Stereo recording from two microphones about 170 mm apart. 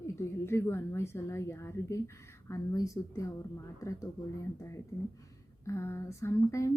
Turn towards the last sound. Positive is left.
turn(degrees=15)  # may be behind; listen again after turning